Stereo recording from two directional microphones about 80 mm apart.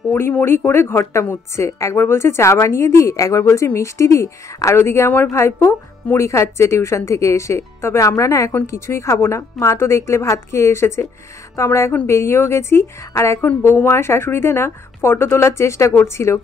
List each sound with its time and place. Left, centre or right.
0.3 s a woman's voice: left